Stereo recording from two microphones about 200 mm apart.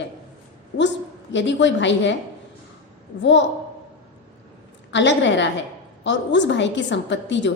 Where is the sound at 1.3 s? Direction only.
65° left (ahead or behind).